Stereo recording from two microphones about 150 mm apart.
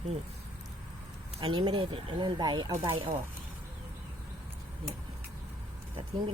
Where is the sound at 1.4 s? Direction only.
35° right (ahead or behind).